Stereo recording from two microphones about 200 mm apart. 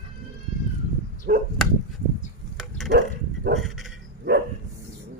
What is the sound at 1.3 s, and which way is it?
Dog, 45° right (ahead or behind).